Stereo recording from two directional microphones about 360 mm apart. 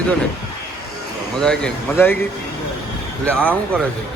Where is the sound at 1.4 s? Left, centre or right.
Centre.